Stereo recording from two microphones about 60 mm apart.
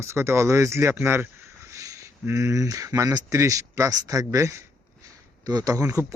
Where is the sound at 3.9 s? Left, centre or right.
Right.